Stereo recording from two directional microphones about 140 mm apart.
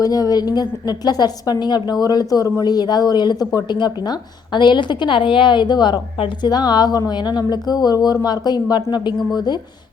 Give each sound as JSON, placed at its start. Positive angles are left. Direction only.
{"t": 0.0, "sound": "a woman's voice", "side_deg": 25}